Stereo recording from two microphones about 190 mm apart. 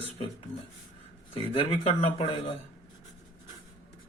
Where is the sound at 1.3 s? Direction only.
30° left (ahead or behind).